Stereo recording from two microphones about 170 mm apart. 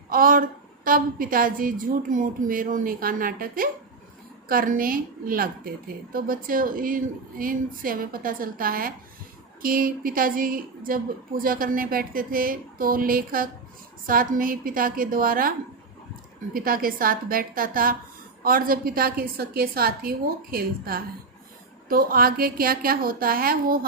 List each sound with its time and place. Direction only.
0.1 s a woman's voice: 55° right (ahead or behind)
16.6 s a woman's voice: 55° right (ahead or behind)